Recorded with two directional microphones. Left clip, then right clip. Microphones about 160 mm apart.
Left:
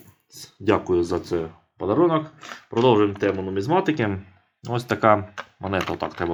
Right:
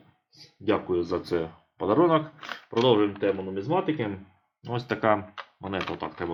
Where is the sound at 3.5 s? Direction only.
60° left (ahead or behind).